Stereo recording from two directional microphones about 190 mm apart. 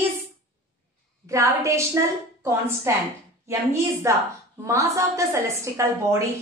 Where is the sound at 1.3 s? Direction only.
15° right (ahead or behind).